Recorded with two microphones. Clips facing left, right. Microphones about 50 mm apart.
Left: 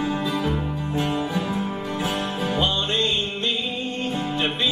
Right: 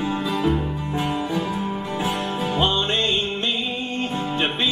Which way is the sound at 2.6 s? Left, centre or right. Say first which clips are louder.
Right 2 dB; right.